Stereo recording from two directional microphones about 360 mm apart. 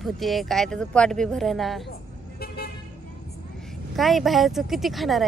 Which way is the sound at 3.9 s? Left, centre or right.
Centre.